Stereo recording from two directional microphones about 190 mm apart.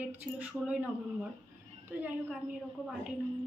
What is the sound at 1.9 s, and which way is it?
A woman's voice, 10° right (ahead or behind).